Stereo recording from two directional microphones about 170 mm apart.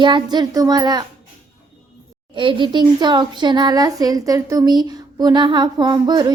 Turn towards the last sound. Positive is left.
turn(degrees=-25)  # may be behind; listen again after turning